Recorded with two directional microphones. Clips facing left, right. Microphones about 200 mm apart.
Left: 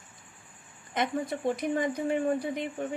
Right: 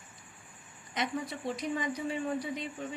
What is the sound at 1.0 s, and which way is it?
A woman's voice, 55° left (ahead or behind).